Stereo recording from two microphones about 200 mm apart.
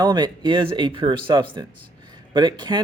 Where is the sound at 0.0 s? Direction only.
20° right (ahead or behind).